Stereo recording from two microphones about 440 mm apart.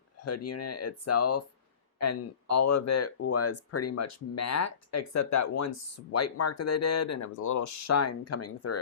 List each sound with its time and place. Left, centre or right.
0.2 s speech: left